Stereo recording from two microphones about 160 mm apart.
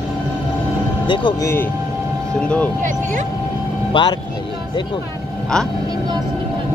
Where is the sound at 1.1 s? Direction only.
30° left (ahead or behind).